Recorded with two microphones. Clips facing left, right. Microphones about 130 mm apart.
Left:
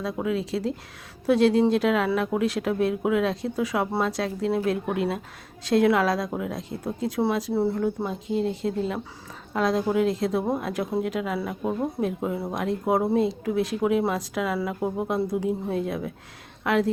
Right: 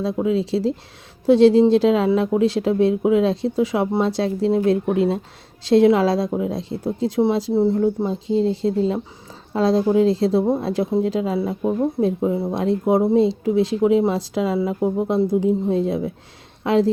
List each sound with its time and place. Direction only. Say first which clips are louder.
0.0 s speech: right 6 dB; 25° right (ahead or behind)